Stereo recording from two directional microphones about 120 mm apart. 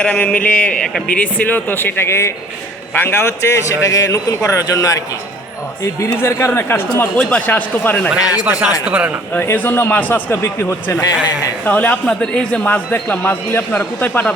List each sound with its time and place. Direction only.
0.0 s a man's voice: 10° left (ahead or behind)
8.4 s speech: 10° right (ahead or behind)
9.3 s speech: 15° left (ahead or behind)